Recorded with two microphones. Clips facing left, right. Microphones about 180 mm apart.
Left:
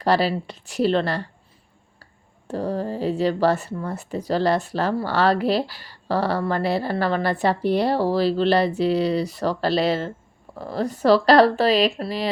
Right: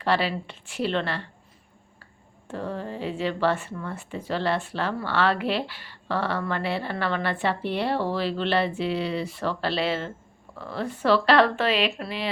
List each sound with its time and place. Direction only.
0.0 s speech: 40° left (ahead or behind)
2.5 s speech: 40° left (ahead or behind)